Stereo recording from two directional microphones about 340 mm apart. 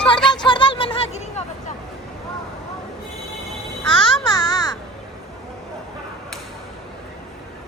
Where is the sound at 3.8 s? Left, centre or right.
Centre.